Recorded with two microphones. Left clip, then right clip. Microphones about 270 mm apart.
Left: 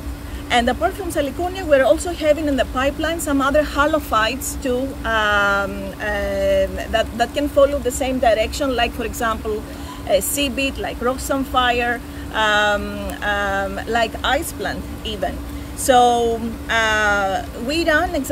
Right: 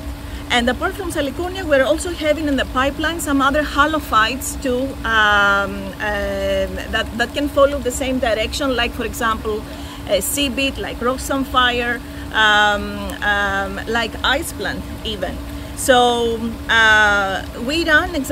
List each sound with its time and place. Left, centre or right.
0.5 s speech: centre